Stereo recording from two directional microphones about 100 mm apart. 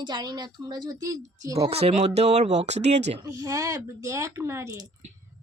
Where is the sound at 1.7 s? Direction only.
90° right.